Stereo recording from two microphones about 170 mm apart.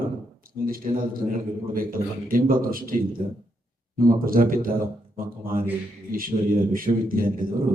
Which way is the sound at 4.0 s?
55° right (ahead or behind).